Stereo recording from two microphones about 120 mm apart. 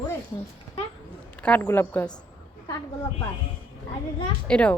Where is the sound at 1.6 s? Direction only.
20° left (ahead or behind).